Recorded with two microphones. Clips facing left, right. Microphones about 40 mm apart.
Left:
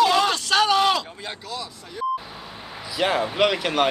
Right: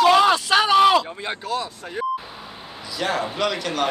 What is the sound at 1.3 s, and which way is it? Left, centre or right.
Speech, right.